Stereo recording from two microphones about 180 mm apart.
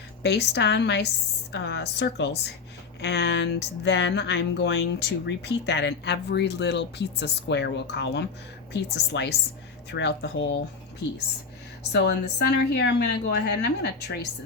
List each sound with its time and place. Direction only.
0.2 s speech: 70° left (ahead or behind)
11.9 s speech: 65° left (ahead or behind)